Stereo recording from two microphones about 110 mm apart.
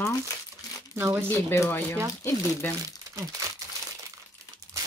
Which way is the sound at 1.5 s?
25° left (ahead or behind).